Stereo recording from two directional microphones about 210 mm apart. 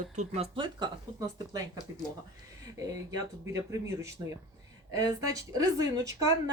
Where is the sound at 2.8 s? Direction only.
15° right (ahead or behind).